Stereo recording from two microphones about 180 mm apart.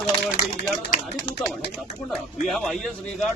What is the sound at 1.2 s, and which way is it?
Speech, 20° left (ahead or behind).